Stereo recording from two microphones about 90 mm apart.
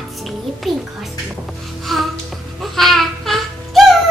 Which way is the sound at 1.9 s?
Centre (ahead or behind).